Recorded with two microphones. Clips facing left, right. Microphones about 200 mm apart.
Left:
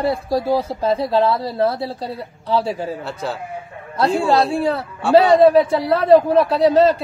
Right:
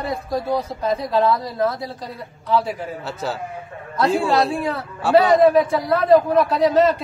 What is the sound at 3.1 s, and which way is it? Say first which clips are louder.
Speech: left 1 dB; centre (ahead or behind).